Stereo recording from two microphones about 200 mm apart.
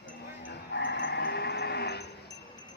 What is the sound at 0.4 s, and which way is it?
Sheep, 65° left (ahead or behind).